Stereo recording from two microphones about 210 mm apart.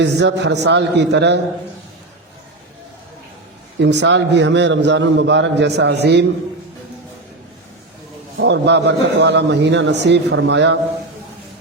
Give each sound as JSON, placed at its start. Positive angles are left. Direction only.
{"t": 0.0, "sound": "a man's voice", "side_deg": -55}
{"t": 3.8, "sound": "a man's voice", "side_deg": -55}
{"t": 8.4, "sound": "a man's voice", "side_deg": -55}